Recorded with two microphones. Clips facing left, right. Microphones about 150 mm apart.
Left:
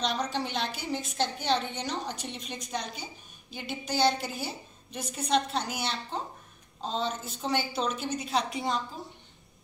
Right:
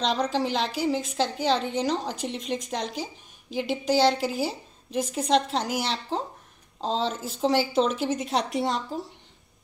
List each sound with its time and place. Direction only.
0.0 s a woman's voice: 90° right